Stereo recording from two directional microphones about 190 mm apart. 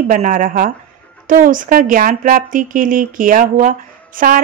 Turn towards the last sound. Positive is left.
turn(degrees=-45)  # may be behind; listen again after turning